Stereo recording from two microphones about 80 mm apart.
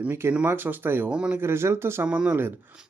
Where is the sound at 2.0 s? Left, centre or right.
Centre.